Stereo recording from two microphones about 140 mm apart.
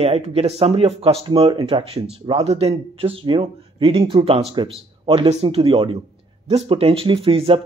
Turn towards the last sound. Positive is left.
turn(degrees=-40)  # may be behind; listen again after turning